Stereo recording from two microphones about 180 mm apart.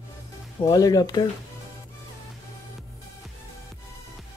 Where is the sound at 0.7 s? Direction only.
20° left (ahead or behind).